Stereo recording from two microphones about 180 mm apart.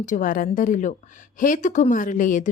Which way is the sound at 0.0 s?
45° left (ahead or behind).